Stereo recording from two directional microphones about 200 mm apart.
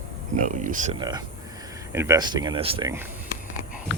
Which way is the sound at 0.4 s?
40° right (ahead or behind).